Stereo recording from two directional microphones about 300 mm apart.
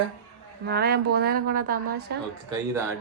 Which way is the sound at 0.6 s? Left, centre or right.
Right.